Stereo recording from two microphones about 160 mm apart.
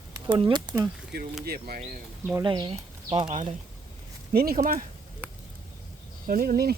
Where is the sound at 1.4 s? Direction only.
75° right (ahead or behind).